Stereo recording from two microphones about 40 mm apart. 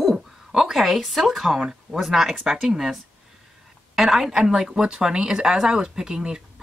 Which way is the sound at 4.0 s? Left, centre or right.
Centre.